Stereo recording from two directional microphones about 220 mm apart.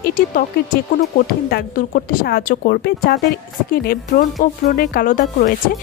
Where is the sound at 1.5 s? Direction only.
40° left (ahead or behind).